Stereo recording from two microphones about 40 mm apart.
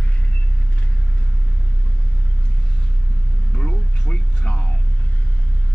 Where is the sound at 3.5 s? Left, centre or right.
Left.